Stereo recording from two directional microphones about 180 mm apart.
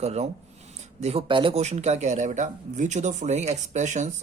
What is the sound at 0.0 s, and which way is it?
Speech, 35° right (ahead or behind).